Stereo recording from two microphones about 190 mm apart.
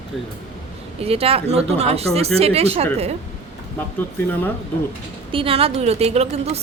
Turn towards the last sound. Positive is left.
turn(degrees=-35)  # may be behind; listen again after turning